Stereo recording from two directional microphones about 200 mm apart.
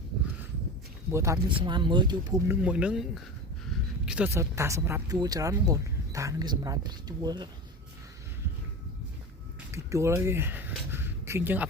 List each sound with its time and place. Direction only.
1.1 s speech: 15° right (ahead or behind)
2.5 s speech: 5° right (ahead or behind)
9.7 s speech: 15° right (ahead or behind)